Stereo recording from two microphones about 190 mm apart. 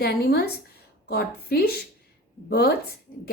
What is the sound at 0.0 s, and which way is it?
A woman's voice, 55° left (ahead or behind).